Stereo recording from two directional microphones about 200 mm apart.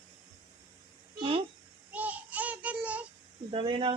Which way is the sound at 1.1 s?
25° right (ahead or behind).